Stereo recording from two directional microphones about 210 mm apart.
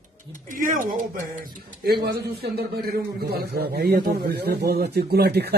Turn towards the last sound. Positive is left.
turn(degrees=-50)  # may be behind; listen again after turning